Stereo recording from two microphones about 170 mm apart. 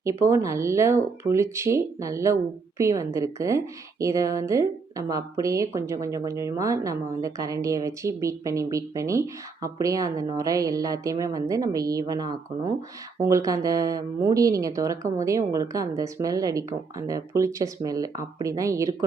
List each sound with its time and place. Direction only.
0.0 s a woman's voice: 15° right (ahead or behind)